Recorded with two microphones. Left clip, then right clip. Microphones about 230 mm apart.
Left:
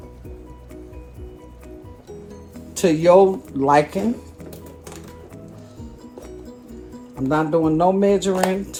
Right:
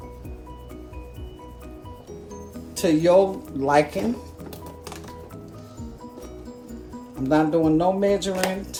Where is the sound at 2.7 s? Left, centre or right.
Left.